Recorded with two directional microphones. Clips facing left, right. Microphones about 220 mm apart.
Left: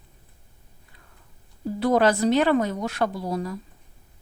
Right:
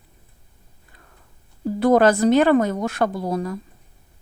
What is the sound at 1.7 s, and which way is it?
Speech, 50° right (ahead or behind).